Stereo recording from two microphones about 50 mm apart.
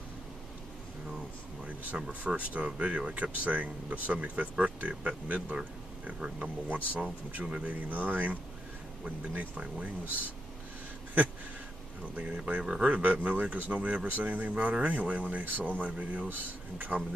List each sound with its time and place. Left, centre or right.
2.0 s speech: centre
12.2 s speech: right